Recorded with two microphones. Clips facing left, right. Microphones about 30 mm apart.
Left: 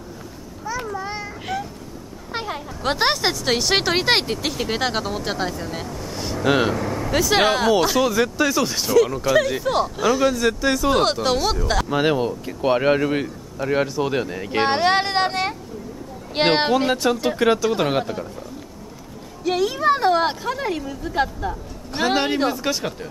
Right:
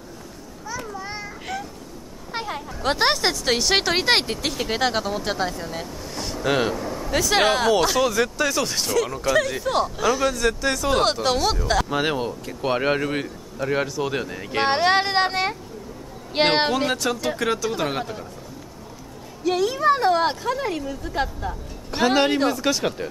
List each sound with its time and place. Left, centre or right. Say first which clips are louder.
0.7 s a sound: left 5 dB; centre
1.0 s children playing: left 3 dB; centre
2.3 s speech: left 1 dB; centre
6.8 s vehicle: left 4 dB; left
7.1 s speech: left 1 dB; centre
16.9 s speech: left 4 dB; centre
19.4 s speech: even; centre